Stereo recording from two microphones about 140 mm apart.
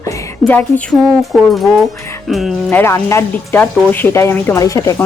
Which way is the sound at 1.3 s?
Centre (ahead or behind).